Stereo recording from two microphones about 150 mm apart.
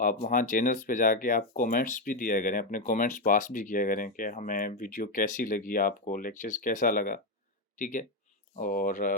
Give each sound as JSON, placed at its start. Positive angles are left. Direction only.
{"t": 0.0, "sound": "speech", "side_deg": 65}